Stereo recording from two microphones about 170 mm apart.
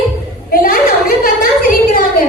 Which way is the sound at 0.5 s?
55° left (ahead or behind).